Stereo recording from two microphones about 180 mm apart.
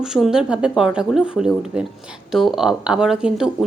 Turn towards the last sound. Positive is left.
turn(degrees=-5)  # may be behind; listen again after turning